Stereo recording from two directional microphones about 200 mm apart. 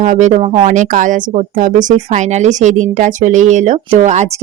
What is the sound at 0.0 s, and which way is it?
Speech, 40° right (ahead or behind).